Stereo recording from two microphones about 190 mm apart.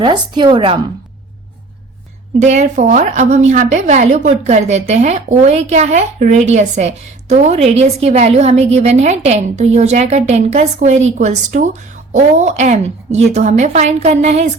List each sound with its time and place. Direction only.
0.0 s a woman's voice: 25° right (ahead or behind)
2.4 s a woman's voice: 35° right (ahead or behind)